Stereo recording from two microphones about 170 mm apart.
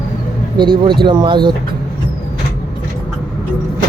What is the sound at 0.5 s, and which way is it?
Speech, 25° right (ahead or behind).